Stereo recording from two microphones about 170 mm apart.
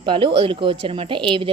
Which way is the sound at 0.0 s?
30° right (ahead or behind).